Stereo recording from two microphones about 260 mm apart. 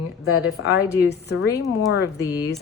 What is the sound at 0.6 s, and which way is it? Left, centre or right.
Speech, left.